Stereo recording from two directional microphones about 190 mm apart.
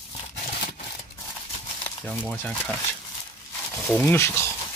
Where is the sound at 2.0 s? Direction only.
Centre (ahead or behind).